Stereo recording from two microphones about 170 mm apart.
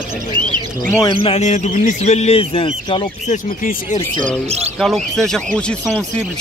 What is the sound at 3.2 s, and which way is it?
Speech, 50° left (ahead or behind).